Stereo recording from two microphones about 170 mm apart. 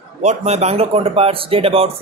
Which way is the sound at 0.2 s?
40° right (ahead or behind).